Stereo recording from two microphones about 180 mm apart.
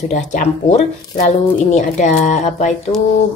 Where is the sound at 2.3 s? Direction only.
40° left (ahead or behind).